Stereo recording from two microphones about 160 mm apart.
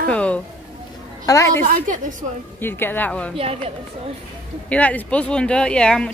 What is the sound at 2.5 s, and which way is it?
Speech, 15° left (ahead or behind).